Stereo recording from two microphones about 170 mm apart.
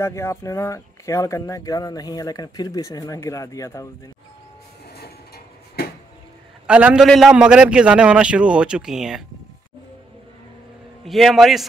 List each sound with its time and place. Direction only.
0.0 s speech: 15° left (ahead or behind)
4.8 s a sound: 65° left (ahead or behind)
6.7 s a man's voice: 5° right (ahead or behind)
11.1 s a man's voice: centre (ahead or behind)